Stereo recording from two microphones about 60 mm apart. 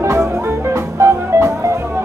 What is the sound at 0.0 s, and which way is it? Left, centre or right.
Music, right.